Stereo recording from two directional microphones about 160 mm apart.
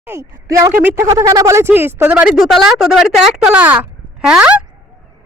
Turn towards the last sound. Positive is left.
turn(degrees=-5)  # may be behind; listen again after turning